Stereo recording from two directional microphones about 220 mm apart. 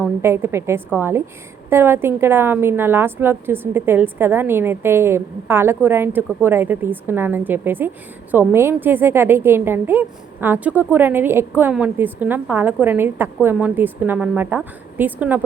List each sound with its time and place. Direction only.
0.0 s a woman's voice: 10° right (ahead or behind)